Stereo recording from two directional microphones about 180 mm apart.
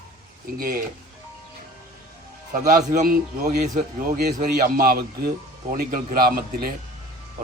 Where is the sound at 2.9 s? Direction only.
45° right (ahead or behind).